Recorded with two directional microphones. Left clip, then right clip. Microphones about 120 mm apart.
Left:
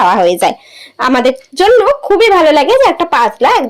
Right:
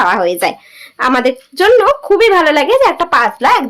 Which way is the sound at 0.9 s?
15° left (ahead or behind).